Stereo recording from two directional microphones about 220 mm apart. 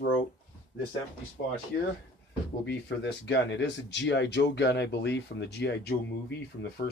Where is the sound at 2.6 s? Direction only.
50° left (ahead or behind).